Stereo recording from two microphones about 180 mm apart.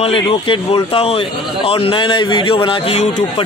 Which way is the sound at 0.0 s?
30° left (ahead or behind).